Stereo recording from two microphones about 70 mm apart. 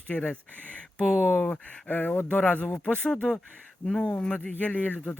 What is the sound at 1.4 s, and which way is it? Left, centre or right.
Speech, left.